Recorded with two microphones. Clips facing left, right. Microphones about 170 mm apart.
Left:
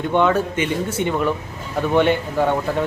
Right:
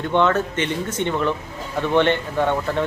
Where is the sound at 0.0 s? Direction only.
10° left (ahead or behind).